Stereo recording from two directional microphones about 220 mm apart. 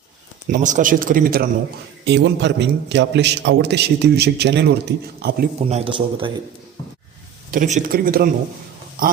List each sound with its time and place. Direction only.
0.5 s speech: 35° right (ahead or behind)
2.0 s a man's voice: 50° right (ahead or behind)
5.6 s speech: 25° right (ahead or behind)
7.5 s speech: 35° right (ahead or behind)